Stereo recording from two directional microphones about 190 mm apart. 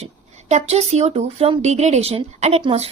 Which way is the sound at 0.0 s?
35° right (ahead or behind).